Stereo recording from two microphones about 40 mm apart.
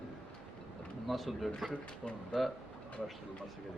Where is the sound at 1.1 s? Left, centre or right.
Centre.